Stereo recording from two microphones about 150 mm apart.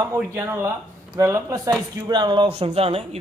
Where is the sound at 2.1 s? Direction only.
30° right (ahead or behind).